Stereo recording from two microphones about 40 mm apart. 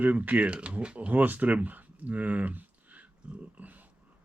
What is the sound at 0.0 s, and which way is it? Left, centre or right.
Speech, right.